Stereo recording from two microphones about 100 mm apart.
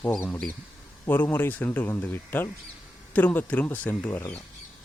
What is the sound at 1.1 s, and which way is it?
Speech, 20° left (ahead or behind).